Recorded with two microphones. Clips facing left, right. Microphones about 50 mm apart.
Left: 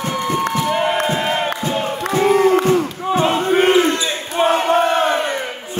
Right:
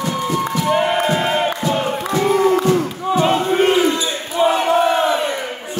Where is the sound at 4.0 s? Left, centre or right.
Left.